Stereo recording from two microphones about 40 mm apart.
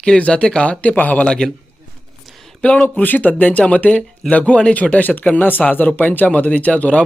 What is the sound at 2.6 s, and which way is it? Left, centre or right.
Speech, left.